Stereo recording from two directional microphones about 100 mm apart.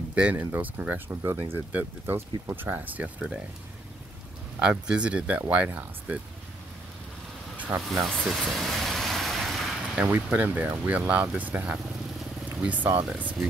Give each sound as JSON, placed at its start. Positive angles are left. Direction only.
{"t": 0.1, "sound": "speech", "side_deg": -15}
{"t": 4.6, "sound": "speech", "side_deg": -10}
{"t": 7.5, "sound": "vehicle", "side_deg": -15}
{"t": 7.9, "sound": "vehicle", "side_deg": 0}
{"t": 9.9, "sound": "speech", "side_deg": -15}